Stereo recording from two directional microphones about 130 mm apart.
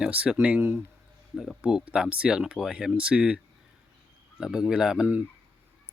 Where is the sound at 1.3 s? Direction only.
5° left (ahead or behind).